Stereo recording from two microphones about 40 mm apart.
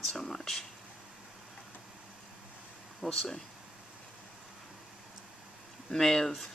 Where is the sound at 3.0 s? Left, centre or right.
Centre.